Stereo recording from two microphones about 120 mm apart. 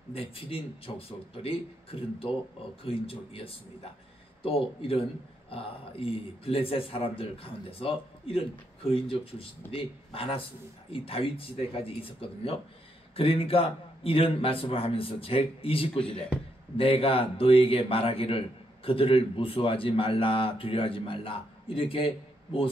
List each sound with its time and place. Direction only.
0.1 s a man's voice: 50° left (ahead or behind)